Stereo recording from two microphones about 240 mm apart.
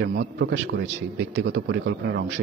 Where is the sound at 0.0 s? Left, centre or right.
Right.